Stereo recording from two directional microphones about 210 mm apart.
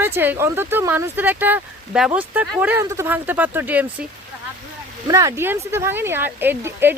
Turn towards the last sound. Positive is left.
turn(degrees=-10)  # may be behind; listen again after turning